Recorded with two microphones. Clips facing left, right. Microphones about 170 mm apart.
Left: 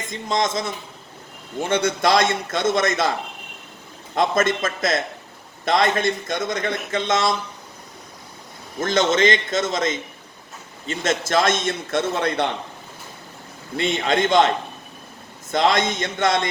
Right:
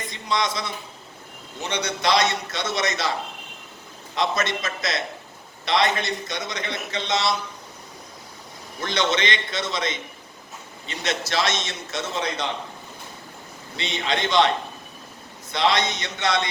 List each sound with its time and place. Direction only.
0.1 s a man's voice: 45° left (ahead or behind)
8.8 s a man's voice: 45° left (ahead or behind)
13.7 s a man's voice: 50° left (ahead or behind)
15.5 s a man's voice: 50° left (ahead or behind)